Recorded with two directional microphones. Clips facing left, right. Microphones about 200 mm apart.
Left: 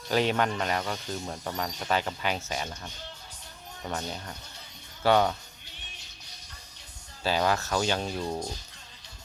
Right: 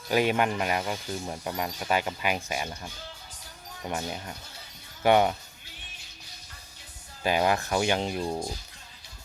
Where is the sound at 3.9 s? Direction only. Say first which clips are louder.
Right 2 dB; 10° right (ahead or behind).